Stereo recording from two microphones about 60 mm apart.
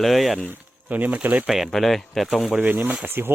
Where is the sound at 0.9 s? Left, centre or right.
Right.